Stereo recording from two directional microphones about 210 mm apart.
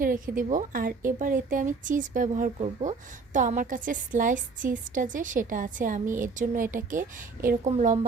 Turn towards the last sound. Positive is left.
turn(degrees=-35)  # may be behind; listen again after turning